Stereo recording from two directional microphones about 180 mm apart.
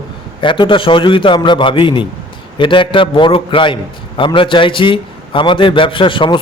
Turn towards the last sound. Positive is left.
turn(degrees=30)  # may be behind; listen again after turning